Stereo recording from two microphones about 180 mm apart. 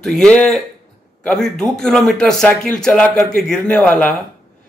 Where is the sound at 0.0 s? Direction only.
5° left (ahead or behind).